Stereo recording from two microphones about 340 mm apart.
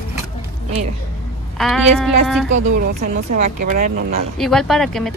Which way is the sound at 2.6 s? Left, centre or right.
Right.